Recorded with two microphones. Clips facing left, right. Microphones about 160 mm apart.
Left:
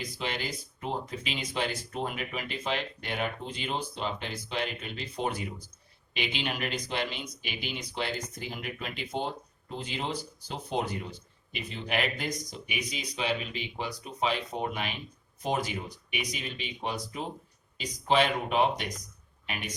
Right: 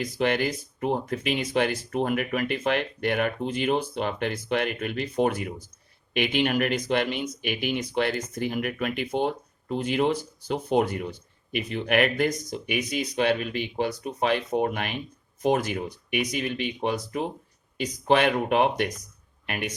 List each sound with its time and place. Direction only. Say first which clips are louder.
0.0 s speech: right 10 dB; 55° right (ahead or behind)